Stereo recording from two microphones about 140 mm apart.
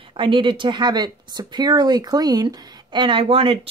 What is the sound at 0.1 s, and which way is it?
Speech, 35° right (ahead or behind).